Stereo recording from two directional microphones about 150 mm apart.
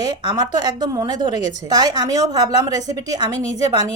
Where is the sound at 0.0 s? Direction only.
25° right (ahead or behind).